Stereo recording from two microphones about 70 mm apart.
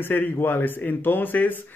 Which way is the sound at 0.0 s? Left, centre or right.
Left.